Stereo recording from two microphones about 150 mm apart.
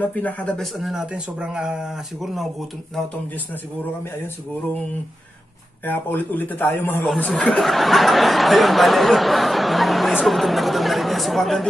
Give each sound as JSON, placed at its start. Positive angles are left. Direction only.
{"t": 0.0, "sound": "speech", "side_deg": 10}
{"t": 5.9, "sound": "speech", "side_deg": 15}
{"t": 7.2, "sound": "speech", "side_deg": 0}